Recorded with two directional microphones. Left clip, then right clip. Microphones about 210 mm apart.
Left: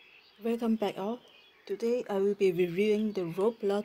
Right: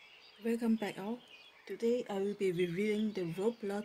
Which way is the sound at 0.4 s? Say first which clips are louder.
Left 5 dB; 20° left (ahead or behind).